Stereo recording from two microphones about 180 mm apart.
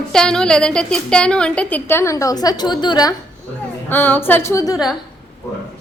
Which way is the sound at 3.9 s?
10° left (ahead or behind).